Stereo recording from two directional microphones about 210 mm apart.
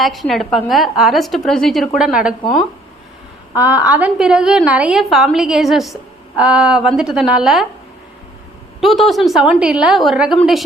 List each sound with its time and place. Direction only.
0.0 s a woman's voice: centre (ahead or behind)
2.4 s speech: 20° left (ahead or behind)
3.6 s a woman's voice: 5° right (ahead or behind)
8.8 s a woman's voice: centre (ahead or behind)